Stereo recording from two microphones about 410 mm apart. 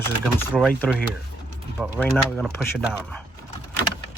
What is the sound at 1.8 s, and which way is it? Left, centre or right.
Speech, centre.